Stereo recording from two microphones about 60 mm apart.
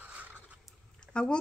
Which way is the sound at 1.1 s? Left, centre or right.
Centre.